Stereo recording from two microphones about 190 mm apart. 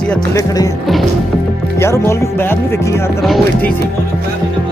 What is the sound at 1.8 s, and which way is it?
Speech, 15° left (ahead or behind).